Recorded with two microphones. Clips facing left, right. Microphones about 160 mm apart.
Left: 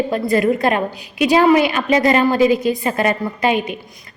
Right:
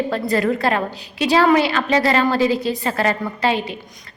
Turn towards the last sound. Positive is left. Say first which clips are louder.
# left 2 dB
turn(degrees=15)  # may be behind; listen again after turning